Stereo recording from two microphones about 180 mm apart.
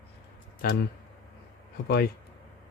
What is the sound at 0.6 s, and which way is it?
Speech, 55° left (ahead or behind).